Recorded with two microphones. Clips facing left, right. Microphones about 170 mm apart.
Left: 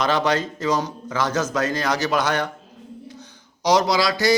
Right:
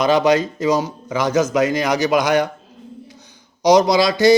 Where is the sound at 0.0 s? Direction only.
10° right (ahead or behind).